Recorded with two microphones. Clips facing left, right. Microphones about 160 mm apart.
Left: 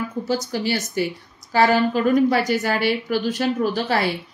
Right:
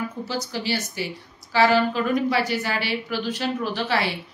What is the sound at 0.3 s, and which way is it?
A woman's voice, 50° left (ahead or behind).